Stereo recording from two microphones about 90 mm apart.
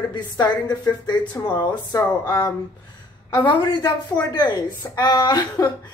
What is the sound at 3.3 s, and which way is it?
A woman's voice, 60° left (ahead or behind).